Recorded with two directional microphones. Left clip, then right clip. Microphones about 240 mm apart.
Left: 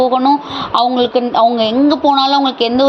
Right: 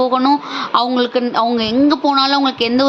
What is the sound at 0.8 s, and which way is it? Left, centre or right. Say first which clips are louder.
Speech: left 4 dB; right.